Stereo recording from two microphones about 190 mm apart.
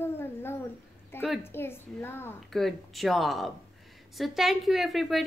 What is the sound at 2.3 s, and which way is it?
A woman's voice, centre (ahead or behind).